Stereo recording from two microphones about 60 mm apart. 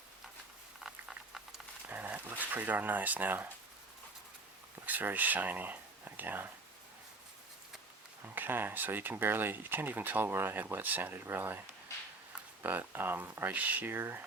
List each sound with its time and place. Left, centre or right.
0.9 s patter: centre
1.9 s speech: right
4.9 s speech: right
8.2 s speech: right
12.6 s speech: right
13.9 s speech: right